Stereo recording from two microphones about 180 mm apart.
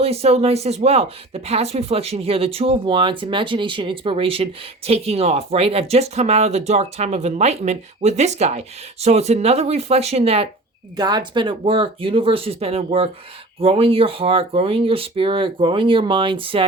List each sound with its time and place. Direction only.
0.0 s speech: 35° right (ahead or behind)
10.9 s speech: 25° right (ahead or behind)